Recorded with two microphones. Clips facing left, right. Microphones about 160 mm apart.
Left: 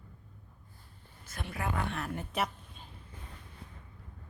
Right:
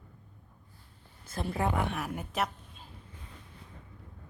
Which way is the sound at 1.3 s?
30° right (ahead or behind).